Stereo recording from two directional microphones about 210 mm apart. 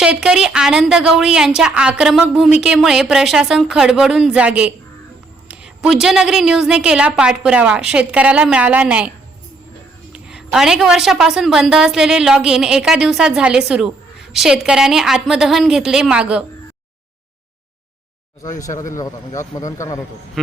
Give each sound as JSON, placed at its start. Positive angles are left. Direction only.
{"t": 0.0, "sound": "a woman's voice", "side_deg": -5}
{"t": 18.9, "sound": "a man's voice", "side_deg": 15}